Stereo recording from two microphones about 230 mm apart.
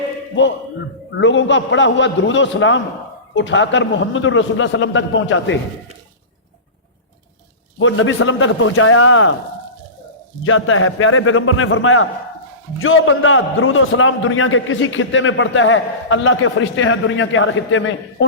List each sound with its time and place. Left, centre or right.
0.4 s a man's voice: left
7.8 s a man's voice: left
10.4 s a man's voice: left